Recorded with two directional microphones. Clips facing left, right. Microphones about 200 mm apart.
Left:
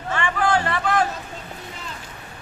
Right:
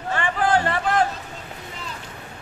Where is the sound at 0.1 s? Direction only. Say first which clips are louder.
Right 1 dB; 35° right (ahead or behind).